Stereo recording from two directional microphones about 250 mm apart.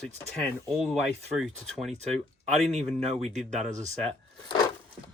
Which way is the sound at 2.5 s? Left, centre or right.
Right.